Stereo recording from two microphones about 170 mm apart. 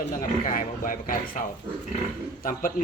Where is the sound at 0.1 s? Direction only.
50° left (ahead or behind).